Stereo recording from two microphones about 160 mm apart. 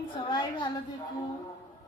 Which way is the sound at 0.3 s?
30° left (ahead or behind).